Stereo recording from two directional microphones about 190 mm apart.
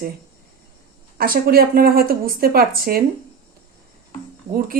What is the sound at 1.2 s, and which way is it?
Speech, 50° right (ahead or behind).